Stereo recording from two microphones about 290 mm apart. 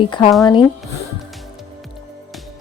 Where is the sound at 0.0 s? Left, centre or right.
Centre.